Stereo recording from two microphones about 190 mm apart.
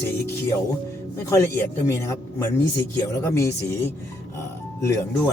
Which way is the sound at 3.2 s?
15° left (ahead or behind).